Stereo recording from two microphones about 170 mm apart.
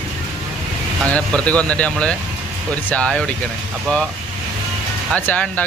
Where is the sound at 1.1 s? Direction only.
10° left (ahead or behind).